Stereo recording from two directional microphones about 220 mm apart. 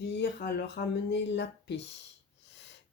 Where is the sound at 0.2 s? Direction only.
50° left (ahead or behind).